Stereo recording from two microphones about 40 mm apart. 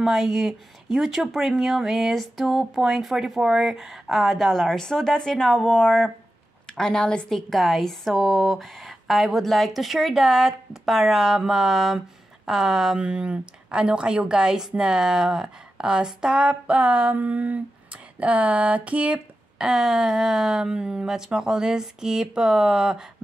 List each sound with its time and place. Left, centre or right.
0.0 s speech: centre
4.7 s a woman's voice: centre
13.0 s a woman's voice: right
16.4 s a sound: right
19.6 s speech: centre